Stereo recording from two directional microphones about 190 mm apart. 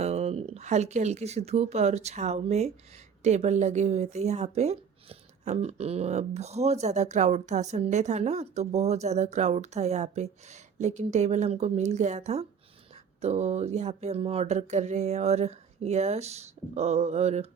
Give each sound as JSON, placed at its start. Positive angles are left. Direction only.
{"t": 0.0, "sound": "speech", "side_deg": -35}